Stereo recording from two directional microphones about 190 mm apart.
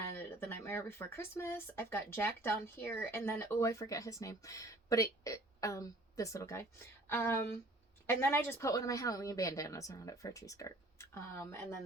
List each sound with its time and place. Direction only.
0.2 s speech: 10° left (ahead or behind)